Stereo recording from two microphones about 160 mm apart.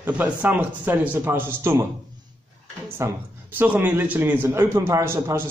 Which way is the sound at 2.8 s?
15° right (ahead or behind).